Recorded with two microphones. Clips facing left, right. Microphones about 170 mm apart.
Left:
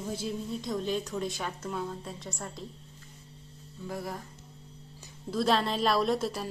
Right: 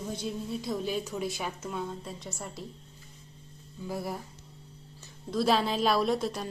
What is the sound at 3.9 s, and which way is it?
Speech, 10° right (ahead or behind).